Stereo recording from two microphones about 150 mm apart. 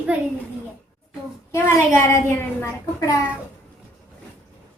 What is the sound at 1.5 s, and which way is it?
A woman's voice, 20° left (ahead or behind).